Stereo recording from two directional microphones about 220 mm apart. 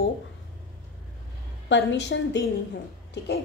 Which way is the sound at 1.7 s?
55° left (ahead or behind).